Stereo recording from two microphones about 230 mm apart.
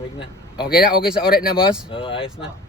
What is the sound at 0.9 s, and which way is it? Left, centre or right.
Speech, centre.